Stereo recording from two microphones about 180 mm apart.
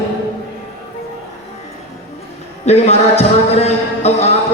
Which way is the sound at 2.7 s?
35° left (ahead or behind).